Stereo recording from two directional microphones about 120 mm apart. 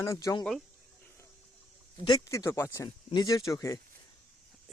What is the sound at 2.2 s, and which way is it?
Speech, 25° left (ahead or behind).